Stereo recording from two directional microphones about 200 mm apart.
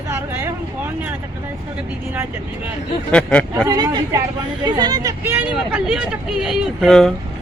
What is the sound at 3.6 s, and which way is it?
A woman's voice, 20° right (ahead or behind).